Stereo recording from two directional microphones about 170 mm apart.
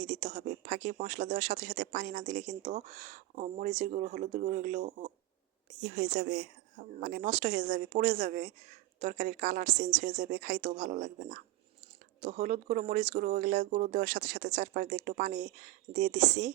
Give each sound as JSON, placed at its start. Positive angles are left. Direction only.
{"t": 0.0, "sound": "speech", "side_deg": -45}